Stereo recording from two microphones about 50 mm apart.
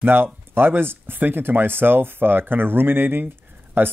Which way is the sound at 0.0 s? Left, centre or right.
Right.